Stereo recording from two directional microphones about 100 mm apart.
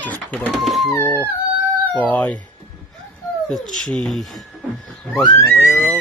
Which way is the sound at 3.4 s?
5° left (ahead or behind).